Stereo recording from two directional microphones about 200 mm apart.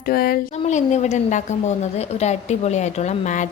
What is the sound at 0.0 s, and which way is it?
A woman's voice, 50° left (ahead or behind).